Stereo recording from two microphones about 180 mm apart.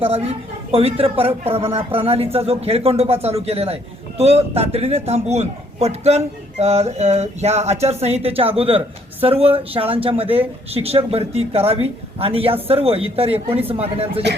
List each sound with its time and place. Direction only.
0.0 s a man's voice: 35° right (ahead or behind)